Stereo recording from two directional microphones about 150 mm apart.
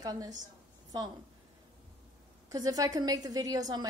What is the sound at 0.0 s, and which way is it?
Speech, 25° right (ahead or behind).